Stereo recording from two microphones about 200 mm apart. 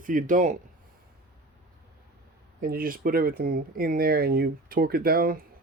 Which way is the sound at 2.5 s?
45° right (ahead or behind).